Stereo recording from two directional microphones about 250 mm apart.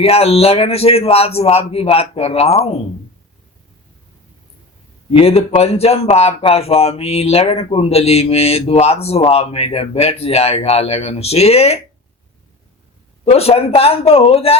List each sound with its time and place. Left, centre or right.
0.0 s speech: left
5.1 s speech: left
13.2 s speech: left